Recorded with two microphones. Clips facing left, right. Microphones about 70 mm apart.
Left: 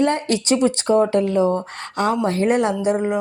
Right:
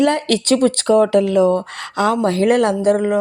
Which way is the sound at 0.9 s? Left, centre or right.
Right.